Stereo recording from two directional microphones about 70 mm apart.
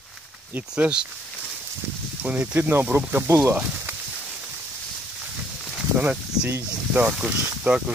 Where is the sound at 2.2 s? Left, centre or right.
Right.